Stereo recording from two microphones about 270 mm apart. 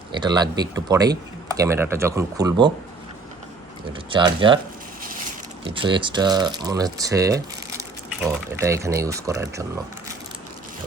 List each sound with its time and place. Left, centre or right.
0.1 s speech: centre
4.1 s speech: centre
5.7 s speech: centre